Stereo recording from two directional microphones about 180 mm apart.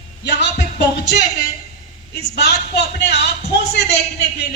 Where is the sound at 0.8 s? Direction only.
70° left (ahead or behind).